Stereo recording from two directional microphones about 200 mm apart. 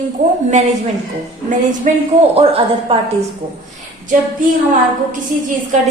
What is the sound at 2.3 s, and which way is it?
Speech, 30° right (ahead or behind).